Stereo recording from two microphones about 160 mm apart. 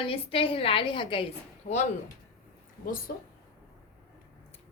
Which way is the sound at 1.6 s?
50° left (ahead or behind).